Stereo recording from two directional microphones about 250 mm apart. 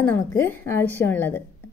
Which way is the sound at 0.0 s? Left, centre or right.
Centre.